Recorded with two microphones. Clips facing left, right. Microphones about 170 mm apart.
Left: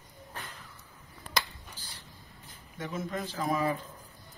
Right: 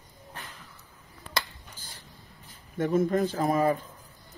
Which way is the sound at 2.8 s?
50° right (ahead or behind).